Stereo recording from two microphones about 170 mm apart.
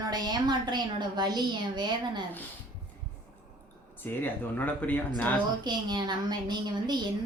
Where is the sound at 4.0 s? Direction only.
10° left (ahead or behind).